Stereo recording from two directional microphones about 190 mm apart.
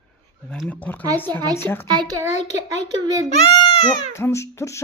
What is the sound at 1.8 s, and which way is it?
A child's voice, 25° right (ahead or behind).